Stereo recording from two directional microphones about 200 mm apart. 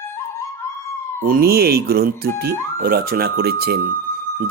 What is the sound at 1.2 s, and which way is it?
Speech, 50° right (ahead or behind).